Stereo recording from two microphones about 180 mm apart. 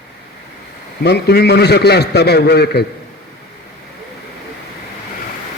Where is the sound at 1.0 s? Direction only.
65° left (ahead or behind).